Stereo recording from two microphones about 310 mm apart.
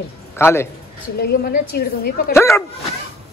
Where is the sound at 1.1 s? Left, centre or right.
Left.